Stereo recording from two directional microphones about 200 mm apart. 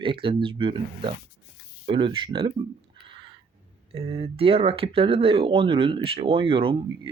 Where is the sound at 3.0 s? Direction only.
25° right (ahead or behind).